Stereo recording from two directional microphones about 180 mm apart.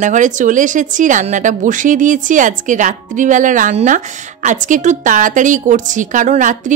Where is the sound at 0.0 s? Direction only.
45° right (ahead or behind).